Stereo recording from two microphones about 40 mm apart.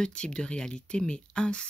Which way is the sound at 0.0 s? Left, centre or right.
Left.